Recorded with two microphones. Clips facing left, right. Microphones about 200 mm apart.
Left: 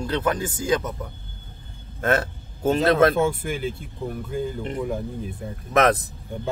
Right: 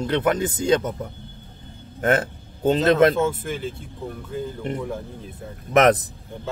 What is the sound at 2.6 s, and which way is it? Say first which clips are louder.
Speech: right 1 dB; 20° right (ahead or behind).